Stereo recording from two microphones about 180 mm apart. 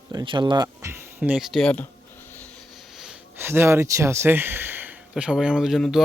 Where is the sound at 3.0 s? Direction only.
5° right (ahead or behind).